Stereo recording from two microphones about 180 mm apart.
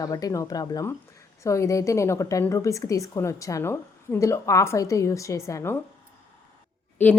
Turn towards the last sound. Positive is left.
turn(degrees=10)  # may be behind; listen again after turning